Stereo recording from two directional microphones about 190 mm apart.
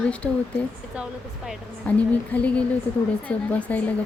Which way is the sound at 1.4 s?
5° left (ahead or behind).